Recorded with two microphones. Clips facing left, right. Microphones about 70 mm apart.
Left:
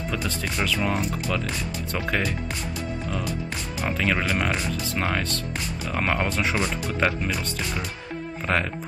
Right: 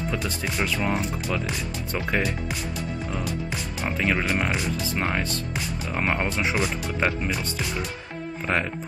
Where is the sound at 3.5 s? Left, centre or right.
Centre.